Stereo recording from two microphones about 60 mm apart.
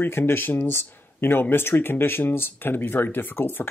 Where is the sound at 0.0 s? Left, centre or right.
Left.